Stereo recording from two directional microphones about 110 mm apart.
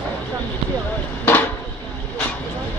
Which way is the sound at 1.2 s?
15° left (ahead or behind).